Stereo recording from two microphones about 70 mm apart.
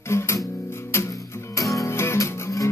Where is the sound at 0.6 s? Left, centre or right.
Left.